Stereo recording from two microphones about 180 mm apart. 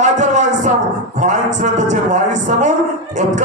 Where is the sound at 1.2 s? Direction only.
45° right (ahead or behind).